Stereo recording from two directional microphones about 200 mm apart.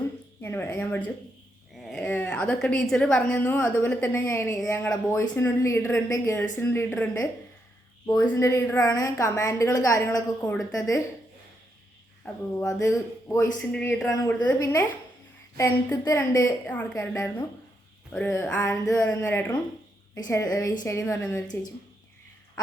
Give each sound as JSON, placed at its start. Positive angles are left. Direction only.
{"t": 0.4, "sound": "a woman's voice", "side_deg": 10}
{"t": 12.2, "sound": "a woman's voice", "side_deg": 10}